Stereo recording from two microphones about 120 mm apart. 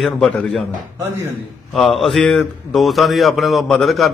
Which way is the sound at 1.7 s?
Centre (ahead or behind).